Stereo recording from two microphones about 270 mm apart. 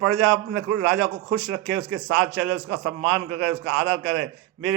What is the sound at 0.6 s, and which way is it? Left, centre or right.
A man's voice, right.